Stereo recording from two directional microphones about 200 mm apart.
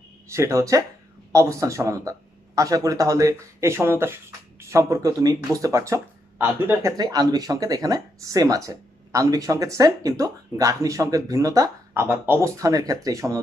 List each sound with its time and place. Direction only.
0.3 s speech: 15° right (ahead or behind)